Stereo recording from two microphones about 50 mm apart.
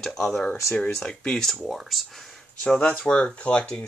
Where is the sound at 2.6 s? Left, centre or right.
Left.